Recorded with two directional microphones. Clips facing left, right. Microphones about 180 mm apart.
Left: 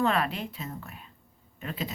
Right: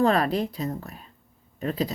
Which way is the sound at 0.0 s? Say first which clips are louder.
Right 6 dB; 40° right (ahead or behind).